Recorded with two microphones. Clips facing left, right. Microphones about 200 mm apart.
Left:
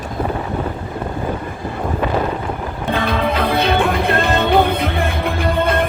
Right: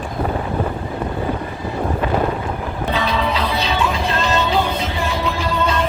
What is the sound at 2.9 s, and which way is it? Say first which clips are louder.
Music: left 3 dB; 55° left (ahead or behind).